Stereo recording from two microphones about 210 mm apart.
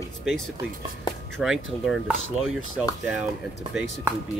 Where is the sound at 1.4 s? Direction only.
Centre (ahead or behind).